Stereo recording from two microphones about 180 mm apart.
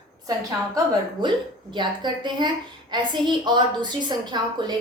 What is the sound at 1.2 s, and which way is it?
A woman's voice, 25° right (ahead or behind).